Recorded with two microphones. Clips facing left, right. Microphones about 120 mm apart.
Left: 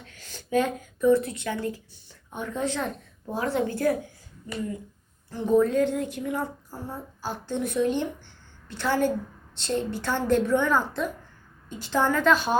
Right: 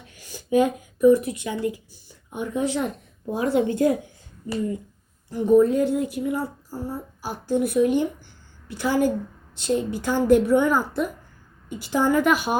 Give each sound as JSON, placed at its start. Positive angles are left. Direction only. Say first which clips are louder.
{"t": 0.0, "sound": "speech", "louder": "right 3 dB", "side_deg": -15}
{"t": 5.3, "sound": "speech", "louder": "right 4 dB", "side_deg": -10}